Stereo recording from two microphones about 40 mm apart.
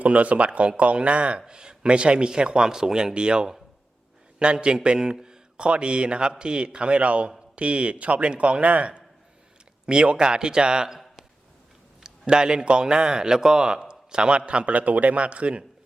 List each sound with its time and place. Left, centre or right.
0.0 s a man's voice: right
12.0 s a man's voice: right